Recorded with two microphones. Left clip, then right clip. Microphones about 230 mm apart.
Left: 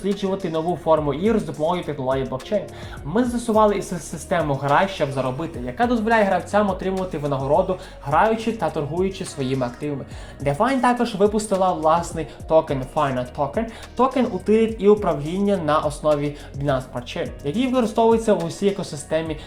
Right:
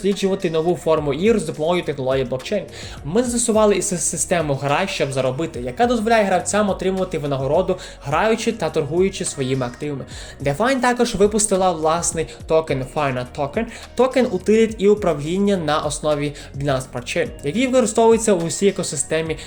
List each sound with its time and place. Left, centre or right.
0.2 s speech: right